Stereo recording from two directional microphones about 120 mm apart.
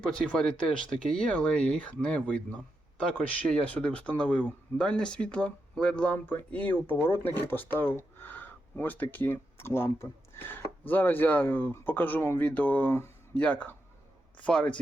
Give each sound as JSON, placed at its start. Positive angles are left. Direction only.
{"t": 0.0, "sound": "a man's voice", "side_deg": 5}